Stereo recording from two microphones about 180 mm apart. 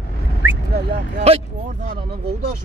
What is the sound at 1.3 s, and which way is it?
Speech, 35° right (ahead or behind).